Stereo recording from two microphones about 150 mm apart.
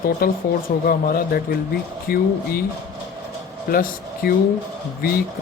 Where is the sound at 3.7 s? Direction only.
80° left.